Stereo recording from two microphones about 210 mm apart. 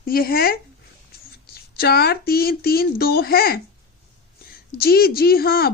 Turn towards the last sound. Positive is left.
turn(degrees=45)  # may be behind; listen again after turning